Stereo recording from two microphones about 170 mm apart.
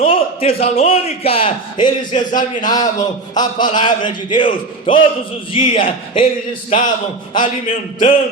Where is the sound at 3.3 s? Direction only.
25° left (ahead or behind).